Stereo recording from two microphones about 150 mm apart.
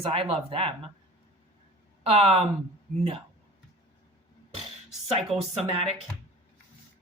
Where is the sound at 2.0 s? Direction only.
40° right (ahead or behind).